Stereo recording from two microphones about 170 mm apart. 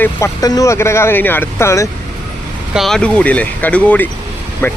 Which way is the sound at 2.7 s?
Centre (ahead or behind).